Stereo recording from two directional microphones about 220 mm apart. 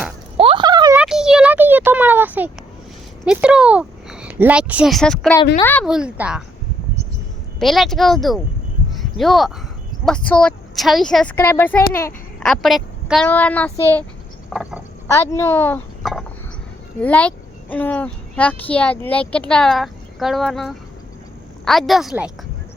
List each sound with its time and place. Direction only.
0.3 s a sound: 25° right (ahead or behind)
0.9 s a sound: 5° right (ahead or behind)
3.2 s a woman's voice: 5° right (ahead or behind)
7.6 s a woman's voice: centre (ahead or behind)
9.0 s a sound: centre (ahead or behind)
10.1 s a woman's voice: 5° left (ahead or behind)
14.5 s frog: 5° right (ahead or behind)
15.0 s speech: 15° left (ahead or behind)
17.0 s a woman's voice: 5° left (ahead or behind)